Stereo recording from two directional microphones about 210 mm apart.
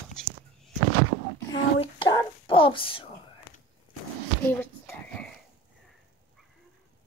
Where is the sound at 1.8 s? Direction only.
25° left (ahead or behind).